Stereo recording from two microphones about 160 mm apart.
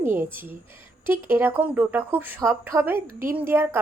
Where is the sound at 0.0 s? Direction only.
15° right (ahead or behind).